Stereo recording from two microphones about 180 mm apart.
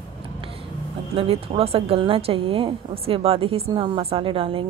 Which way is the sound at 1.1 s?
30° right (ahead or behind).